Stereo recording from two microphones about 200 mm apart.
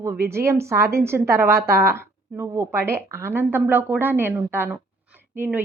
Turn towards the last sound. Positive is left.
turn(degrees=-10)  # may be behind; listen again after turning